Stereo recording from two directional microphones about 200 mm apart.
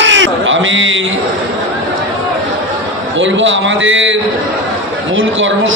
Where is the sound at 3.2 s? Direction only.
70° right (ahead or behind).